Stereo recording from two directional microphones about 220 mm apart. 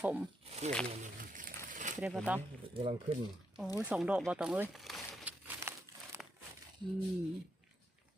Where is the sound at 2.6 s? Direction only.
25° right (ahead or behind).